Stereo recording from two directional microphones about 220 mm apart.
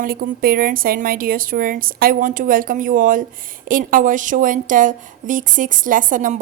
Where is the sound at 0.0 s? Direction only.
40° right (ahead or behind).